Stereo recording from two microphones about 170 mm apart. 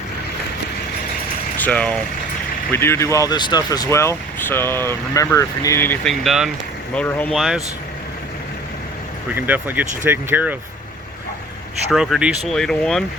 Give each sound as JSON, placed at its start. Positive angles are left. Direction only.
{"t": 1.5, "sound": "speech", "side_deg": 10}
{"t": 6.9, "sound": "speech", "side_deg": 10}
{"t": 7.3, "sound": "speech", "side_deg": 0}
{"t": 9.3, "sound": "speech", "side_deg": -10}
{"t": 11.9, "sound": "speech", "side_deg": 0}